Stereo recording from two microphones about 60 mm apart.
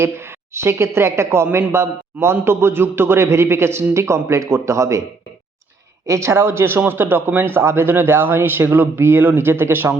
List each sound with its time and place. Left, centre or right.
0.0 s a man's voice: right
6.1 s a man's voice: right